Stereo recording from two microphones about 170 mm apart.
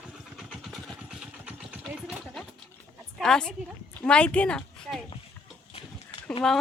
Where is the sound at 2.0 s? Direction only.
Centre (ahead or behind).